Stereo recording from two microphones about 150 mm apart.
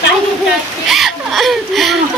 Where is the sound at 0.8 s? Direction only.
Centre (ahead or behind).